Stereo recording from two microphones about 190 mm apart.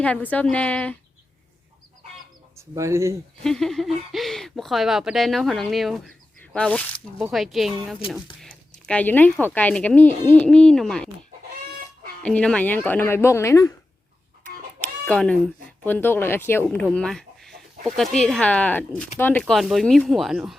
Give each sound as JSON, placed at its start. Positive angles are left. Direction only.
{"t": 0.0, "sound": "speech", "side_deg": 5}
{"t": 2.6, "sound": "speech", "side_deg": -15}
{"t": 3.4, "sound": "speech", "side_deg": 0}
{"t": 12.2, "sound": "speech", "side_deg": 5}
{"t": 15.0, "sound": "speech", "side_deg": 5}